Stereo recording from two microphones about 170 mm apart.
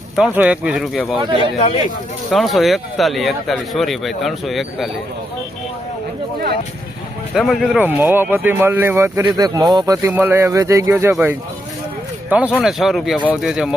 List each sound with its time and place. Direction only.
0.2 s speech: 5° right (ahead or behind)
1.4 s speech: 35° left (ahead or behind)
2.3 s speech: centre (ahead or behind)
7.3 s speech: centre (ahead or behind)